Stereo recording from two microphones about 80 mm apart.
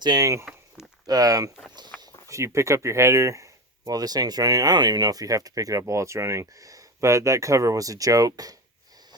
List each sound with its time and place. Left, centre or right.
0.2 s speech: right
1.0 s speech: right